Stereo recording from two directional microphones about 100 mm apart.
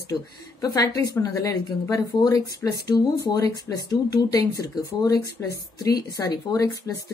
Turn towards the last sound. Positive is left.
turn(degrees=35)  # may be behind; listen again after turning